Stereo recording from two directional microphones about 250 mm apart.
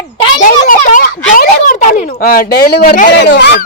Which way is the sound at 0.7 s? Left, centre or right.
Left.